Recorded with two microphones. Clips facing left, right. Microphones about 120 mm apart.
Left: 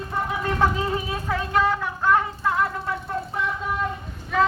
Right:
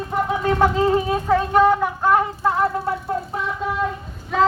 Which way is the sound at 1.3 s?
15° right (ahead or behind).